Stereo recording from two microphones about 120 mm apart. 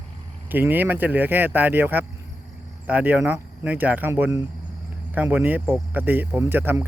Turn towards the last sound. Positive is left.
turn(degrees=-15)  # may be behind; listen again after turning